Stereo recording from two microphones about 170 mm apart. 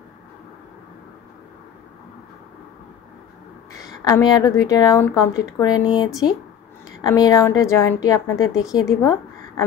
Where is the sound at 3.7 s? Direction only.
20° left (ahead or behind).